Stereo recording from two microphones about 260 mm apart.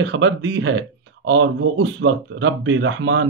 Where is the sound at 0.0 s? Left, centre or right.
Right.